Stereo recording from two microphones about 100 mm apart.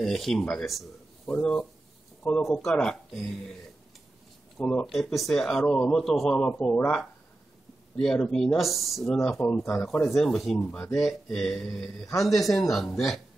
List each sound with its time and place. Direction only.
0.0 s speech: centre (ahead or behind)
4.6 s speech: 10° left (ahead or behind)
6.7 s speech: 20° left (ahead or behind)
7.9 s speech: 5° left (ahead or behind)
10.9 s speech: centre (ahead or behind)